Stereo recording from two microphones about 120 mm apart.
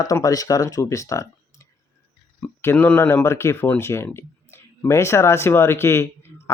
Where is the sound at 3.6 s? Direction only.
10° left (ahead or behind).